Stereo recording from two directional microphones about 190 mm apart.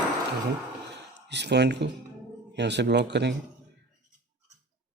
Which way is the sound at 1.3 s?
65° right (ahead or behind).